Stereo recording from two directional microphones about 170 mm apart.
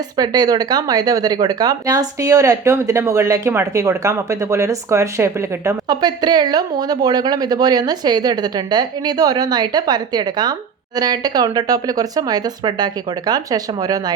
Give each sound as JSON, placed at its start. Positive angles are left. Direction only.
{"t": 0.2, "sound": "speech", "side_deg": -25}